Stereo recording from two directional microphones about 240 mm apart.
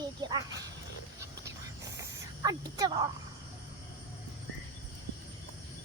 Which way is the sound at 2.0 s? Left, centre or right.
Centre.